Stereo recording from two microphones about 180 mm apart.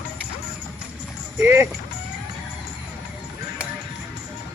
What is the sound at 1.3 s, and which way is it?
Speech, 15° right (ahead or behind).